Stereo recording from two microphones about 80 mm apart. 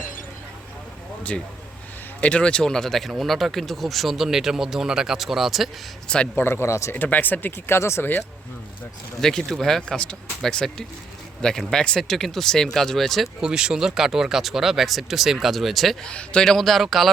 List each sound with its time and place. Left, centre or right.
2.2 s speech: centre
6.3 s speech: left
6.9 s speech: left
7.8 s speech: left
9.2 s speech: centre
16.0 s speech: centre